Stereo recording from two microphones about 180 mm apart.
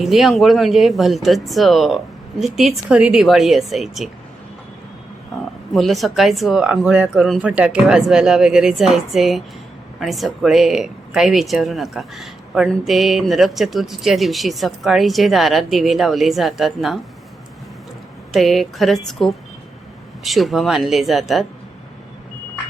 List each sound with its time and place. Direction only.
0.0 s speech: centre (ahead or behind)
5.3 s a sound: centre (ahead or behind)
5.7 s speech: centre (ahead or behind)
18.3 s speech: centre (ahead or behind)